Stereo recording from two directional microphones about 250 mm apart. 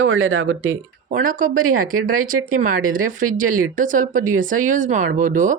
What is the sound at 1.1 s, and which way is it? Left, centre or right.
Speech, right.